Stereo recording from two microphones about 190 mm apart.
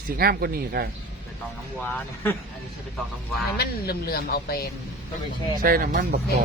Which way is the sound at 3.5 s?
55° left (ahead or behind).